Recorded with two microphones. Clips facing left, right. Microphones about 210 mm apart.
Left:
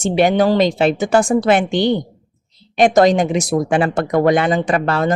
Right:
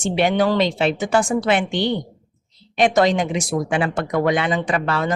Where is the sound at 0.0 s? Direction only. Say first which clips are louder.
Left 4 dB; 40° left (ahead or behind).